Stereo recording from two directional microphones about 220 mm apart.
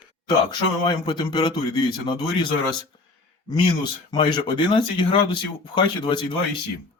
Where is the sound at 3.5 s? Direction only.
20° left (ahead or behind).